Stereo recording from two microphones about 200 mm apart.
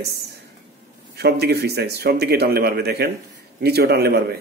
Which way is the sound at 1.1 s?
55° right (ahead or behind).